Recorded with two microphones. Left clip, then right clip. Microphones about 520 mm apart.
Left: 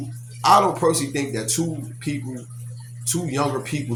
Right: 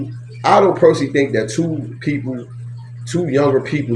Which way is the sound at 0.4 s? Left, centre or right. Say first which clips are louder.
Right 5 dB; left.